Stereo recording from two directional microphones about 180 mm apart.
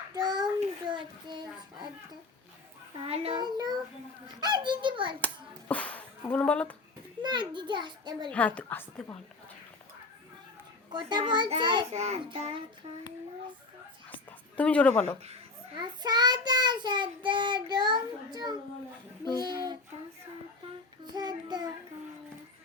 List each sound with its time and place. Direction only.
0.1 s child singing: 20° right (ahead or behind)
0.9 s a child's voice: 25° right (ahead or behind)
3.0 s child singing: 30° right (ahead or behind)
5.2 s a sound: 10° left (ahead or behind)
7.2 s child singing: 25° right (ahead or behind)
8.3 s a woman's voice: 5° left (ahead or behind)
10.9 s child singing: 25° right (ahead or behind)
14.5 s a woman's voice: 5° left (ahead or behind)
15.8 s child singing: 25° right (ahead or behind)
21.1 s child singing: 25° right (ahead or behind)